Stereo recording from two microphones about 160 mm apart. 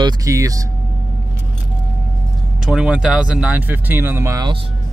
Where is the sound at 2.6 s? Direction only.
5° right (ahead or behind); by 4.5 s 20° right (ahead or behind).